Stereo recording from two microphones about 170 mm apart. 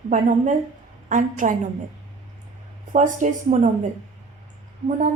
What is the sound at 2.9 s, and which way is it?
Speech, 50° right (ahead or behind).